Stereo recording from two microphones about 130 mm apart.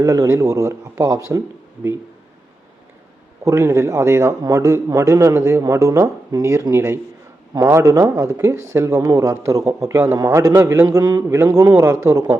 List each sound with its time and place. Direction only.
0.0 s a man's voice: 25° right (ahead or behind)
3.4 s a man's voice: 20° right (ahead or behind)